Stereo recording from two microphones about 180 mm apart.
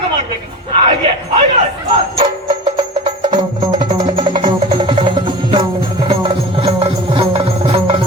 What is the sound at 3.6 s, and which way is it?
Music, 25° right (ahead or behind).